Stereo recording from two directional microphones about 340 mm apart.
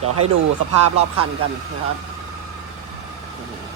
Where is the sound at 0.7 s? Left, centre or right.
Right.